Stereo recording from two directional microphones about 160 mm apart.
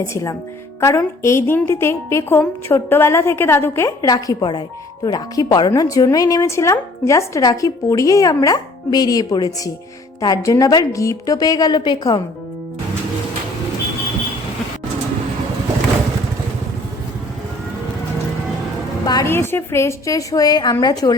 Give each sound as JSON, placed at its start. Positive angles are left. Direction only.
{"t": 0.0, "sound": "a woman's voice", "side_deg": 20}
{"t": 19.0, "sound": "a woman's voice", "side_deg": 20}